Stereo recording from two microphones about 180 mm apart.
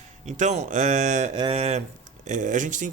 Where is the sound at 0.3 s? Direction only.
40° right (ahead or behind).